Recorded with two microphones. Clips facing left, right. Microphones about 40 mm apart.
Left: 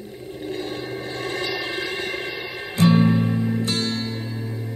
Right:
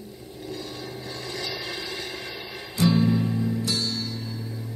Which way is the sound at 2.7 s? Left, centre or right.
Left.